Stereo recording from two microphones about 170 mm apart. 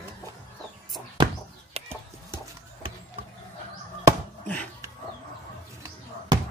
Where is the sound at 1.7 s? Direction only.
40° right (ahead or behind).